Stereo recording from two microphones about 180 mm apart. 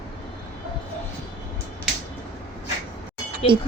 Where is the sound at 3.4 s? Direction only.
35° left (ahead or behind).